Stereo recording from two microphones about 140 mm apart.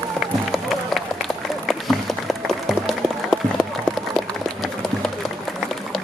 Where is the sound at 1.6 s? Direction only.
Centre (ahead or behind).